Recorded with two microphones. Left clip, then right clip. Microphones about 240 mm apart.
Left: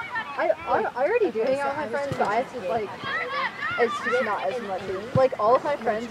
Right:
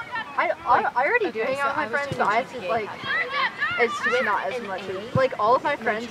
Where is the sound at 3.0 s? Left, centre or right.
Centre.